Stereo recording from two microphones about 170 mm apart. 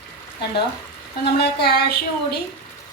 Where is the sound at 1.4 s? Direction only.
70° left (ahead or behind).